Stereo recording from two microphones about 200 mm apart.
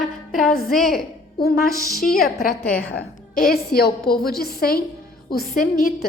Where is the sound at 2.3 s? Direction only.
50° left (ahead or behind).